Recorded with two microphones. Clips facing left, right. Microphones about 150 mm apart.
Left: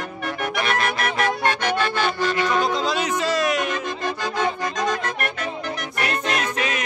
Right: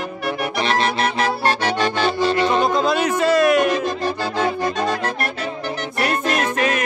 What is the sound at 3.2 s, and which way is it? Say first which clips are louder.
Music: right 9 dB; 55° right (ahead or behind).